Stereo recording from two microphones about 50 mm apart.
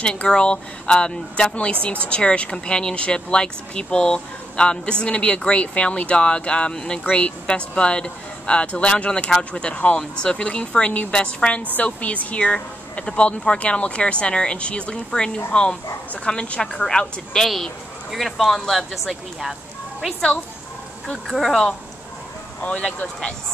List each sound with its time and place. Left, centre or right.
0.0 s speech: centre
17.3 s speech: centre
21.3 s speech: centre
22.6 s speech: left